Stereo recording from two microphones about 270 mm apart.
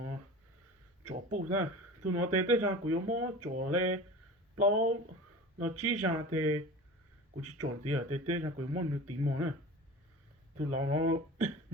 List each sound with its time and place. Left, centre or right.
1.4 s speech: right
10.6 s speech: right